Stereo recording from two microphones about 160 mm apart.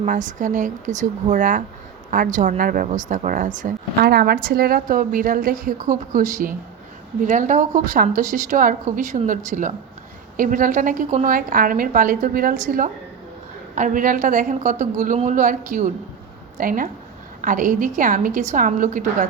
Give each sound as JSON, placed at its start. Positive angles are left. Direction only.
{"t": 0.0, "sound": "a woman's voice", "side_deg": -50}
{"t": 4.0, "sound": "a woman's voice", "side_deg": -75}